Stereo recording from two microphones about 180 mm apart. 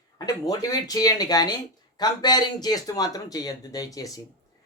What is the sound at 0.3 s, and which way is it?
Speech, 20° left (ahead or behind).